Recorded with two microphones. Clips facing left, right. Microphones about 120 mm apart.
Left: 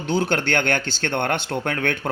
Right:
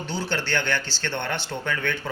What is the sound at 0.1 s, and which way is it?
Speech, 55° left (ahead or behind).